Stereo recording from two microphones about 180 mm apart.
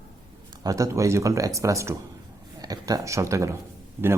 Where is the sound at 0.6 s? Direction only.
20° right (ahead or behind).